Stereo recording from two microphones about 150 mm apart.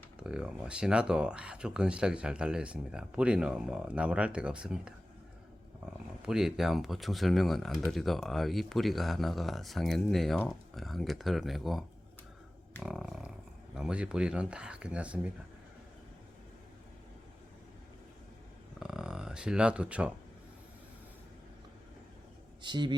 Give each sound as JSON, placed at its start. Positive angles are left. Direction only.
{"t": 0.2, "sound": "speech", "side_deg": -5}
{"t": 6.2, "sound": "speech", "side_deg": -5}
{"t": 12.8, "sound": "a sound", "side_deg": 0}
{"t": 13.7, "sound": "speech", "side_deg": -5}
{"t": 18.8, "sound": "speech", "side_deg": -5}
{"t": 22.6, "sound": "speech", "side_deg": -30}